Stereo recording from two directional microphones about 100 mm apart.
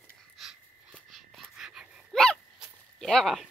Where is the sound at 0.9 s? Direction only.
Centre (ahead or behind).